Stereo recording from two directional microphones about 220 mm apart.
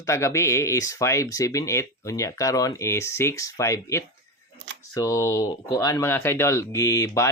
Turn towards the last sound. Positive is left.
turn(degrees=15)  # may be behind; listen again after turning